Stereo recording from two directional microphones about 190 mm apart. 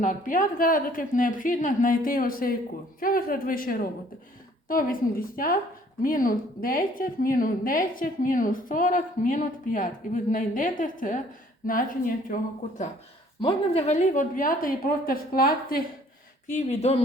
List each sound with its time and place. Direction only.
0.0 s a woman's voice: 45° left (ahead or behind)
13.4 s a woman's voice: 30° left (ahead or behind); by 15.8 s 50° left (ahead or behind)
16.5 s speech: 40° left (ahead or behind)